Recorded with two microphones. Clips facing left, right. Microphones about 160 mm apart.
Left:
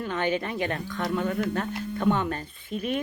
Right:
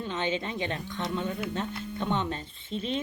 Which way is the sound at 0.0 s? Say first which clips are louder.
Left 3 dB; 20° right (ahead or behind).